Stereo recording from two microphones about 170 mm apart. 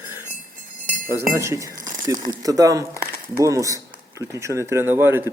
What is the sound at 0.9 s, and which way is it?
Chink, 50° right (ahead or behind).